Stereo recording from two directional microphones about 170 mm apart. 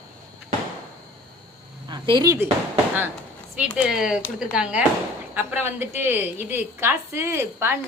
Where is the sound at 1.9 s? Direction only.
25° right (ahead or behind).